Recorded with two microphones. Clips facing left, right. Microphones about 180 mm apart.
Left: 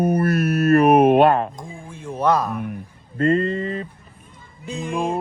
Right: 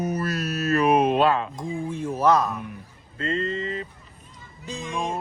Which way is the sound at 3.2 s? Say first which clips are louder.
Left 8 dB; 50° left (ahead or behind).